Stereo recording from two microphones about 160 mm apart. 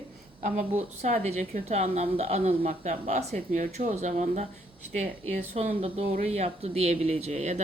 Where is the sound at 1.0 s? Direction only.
45° right (ahead or behind).